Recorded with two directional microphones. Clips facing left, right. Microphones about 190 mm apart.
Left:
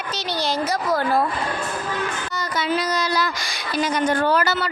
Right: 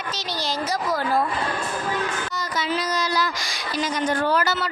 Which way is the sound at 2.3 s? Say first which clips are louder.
Left 3 dB; 60° left (ahead or behind).